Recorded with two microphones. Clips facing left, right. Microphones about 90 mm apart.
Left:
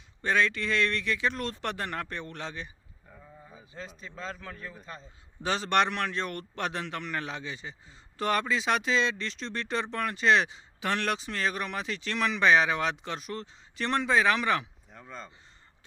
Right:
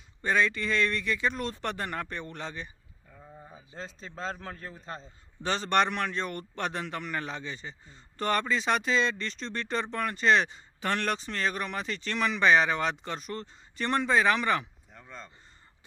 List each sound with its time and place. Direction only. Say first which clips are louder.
0.2 s a man's voice: even; centre (ahead or behind)
3.4 s a man's voice: right 1 dB; 30° right (ahead or behind)
5.4 s a man's voice: even; 5° left (ahead or behind)